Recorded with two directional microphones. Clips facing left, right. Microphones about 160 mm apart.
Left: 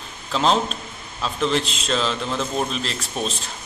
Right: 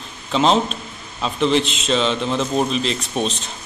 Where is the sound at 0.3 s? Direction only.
Centre (ahead or behind).